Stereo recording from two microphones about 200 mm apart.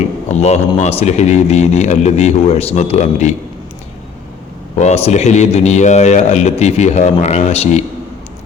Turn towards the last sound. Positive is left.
turn(degrees=35)  # may be behind; listen again after turning